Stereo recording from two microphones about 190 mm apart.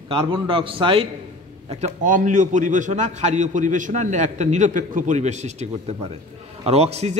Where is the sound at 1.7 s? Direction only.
40° right (ahead or behind).